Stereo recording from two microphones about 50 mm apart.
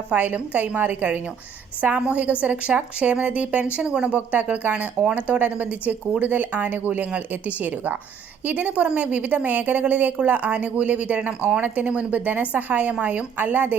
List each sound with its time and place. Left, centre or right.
0.1 s a woman's voice: right
1.8 s a woman's voice: right